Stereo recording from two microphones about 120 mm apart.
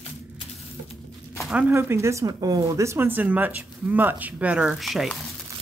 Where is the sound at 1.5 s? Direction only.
20° right (ahead or behind); by 5.2 s centre (ahead or behind).